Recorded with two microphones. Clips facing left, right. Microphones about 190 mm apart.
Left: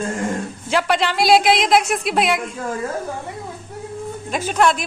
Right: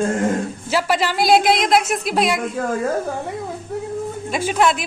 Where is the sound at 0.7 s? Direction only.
5° right (ahead or behind).